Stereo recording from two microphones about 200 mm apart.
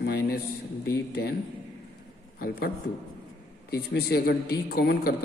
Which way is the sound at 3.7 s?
55° left (ahead or behind).